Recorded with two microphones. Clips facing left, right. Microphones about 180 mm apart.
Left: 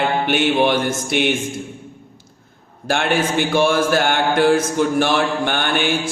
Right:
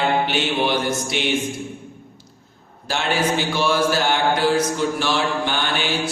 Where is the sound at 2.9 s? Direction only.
55° left (ahead or behind).